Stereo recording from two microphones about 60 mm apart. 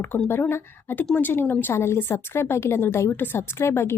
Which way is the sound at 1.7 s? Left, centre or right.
Left.